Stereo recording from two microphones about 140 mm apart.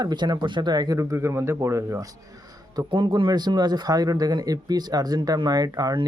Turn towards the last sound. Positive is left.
turn(degrees=-25)  # may be behind; listen again after turning